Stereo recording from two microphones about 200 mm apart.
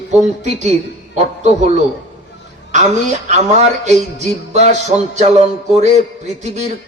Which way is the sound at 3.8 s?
35° right (ahead or behind).